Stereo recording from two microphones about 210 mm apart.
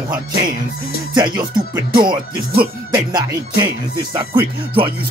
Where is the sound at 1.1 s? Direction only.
20° right (ahead or behind).